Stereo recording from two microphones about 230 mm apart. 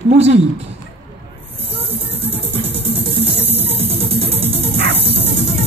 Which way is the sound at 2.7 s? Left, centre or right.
Right.